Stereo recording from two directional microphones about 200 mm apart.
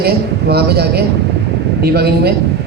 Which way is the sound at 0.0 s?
50° right (ahead or behind).